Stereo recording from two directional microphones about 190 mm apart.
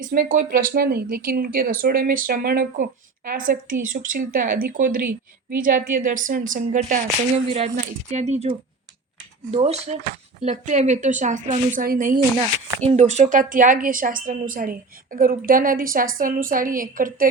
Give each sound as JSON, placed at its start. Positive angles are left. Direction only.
{"t": 0.1, "sound": "speech", "side_deg": -45}
{"t": 12.4, "sound": "speech", "side_deg": -30}